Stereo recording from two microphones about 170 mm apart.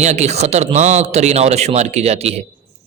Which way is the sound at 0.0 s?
40° right (ahead or behind).